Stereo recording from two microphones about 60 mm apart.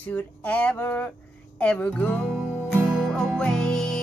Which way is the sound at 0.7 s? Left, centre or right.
Left.